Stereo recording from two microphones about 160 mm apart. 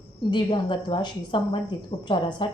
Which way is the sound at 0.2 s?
30° left (ahead or behind).